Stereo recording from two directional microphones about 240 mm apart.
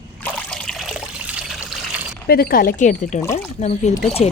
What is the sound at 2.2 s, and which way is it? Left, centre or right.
A woman's voice, left.